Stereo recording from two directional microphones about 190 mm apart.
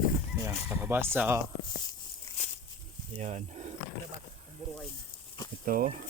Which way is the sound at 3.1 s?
35° right (ahead or behind).